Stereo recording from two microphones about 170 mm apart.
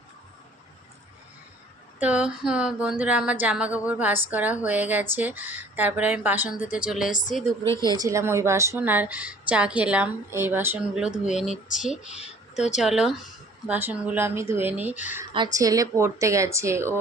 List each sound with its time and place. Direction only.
2.0 s a woman's voice: 5° right (ahead or behind)
7.1 s speech: 50° left (ahead or behind)
7.8 s a woman's voice: 25° right (ahead or behind); by 11.5 s 5° right (ahead or behind)
12.1 s speech: 40° left (ahead or behind)
12.7 s a woman's voice: centre (ahead or behind)